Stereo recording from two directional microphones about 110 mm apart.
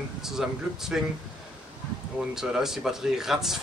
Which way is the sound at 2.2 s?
5° right (ahead or behind).